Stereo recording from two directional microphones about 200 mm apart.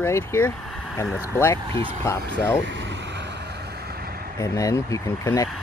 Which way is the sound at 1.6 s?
25° right (ahead or behind).